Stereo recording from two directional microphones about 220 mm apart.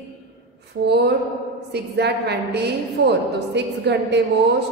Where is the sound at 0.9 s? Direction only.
50° right (ahead or behind).